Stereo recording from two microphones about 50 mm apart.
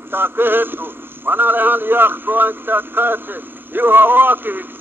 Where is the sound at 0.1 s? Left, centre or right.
Right.